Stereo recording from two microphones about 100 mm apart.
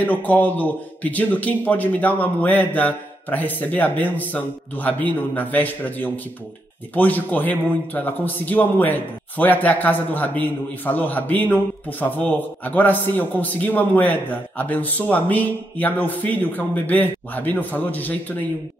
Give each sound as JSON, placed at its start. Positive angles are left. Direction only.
{"t": 0.0, "sound": "a man's voice", "side_deg": 15}